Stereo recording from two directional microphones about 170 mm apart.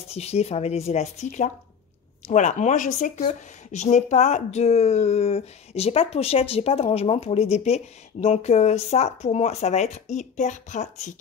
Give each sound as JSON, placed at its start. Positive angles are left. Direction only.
{"t": 0.1, "sound": "speech", "side_deg": 40}